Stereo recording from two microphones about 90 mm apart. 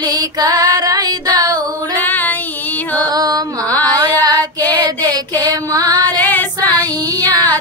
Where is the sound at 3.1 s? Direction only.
45° right (ahead or behind).